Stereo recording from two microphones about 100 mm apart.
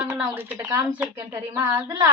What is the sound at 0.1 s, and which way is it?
A woman's voice, 30° right (ahead or behind).